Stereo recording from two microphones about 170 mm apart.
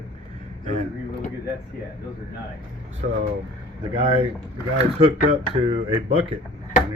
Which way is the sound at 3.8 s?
30° right (ahead or behind).